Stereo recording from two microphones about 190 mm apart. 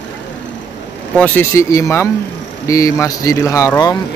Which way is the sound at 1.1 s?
10° left (ahead or behind).